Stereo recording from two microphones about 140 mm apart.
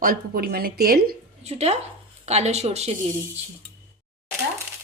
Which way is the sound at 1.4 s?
50° right (ahead or behind).